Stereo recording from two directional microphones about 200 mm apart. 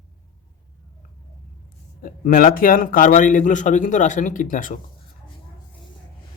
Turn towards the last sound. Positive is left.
turn(degrees=40)  # may be behind; listen again after turning